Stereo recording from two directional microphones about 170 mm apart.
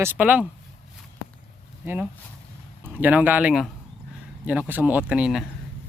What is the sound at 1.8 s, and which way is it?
Speech, 10° right (ahead or behind).